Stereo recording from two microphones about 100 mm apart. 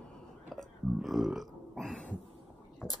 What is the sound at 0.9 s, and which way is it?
Burping, 5° right (ahead or behind).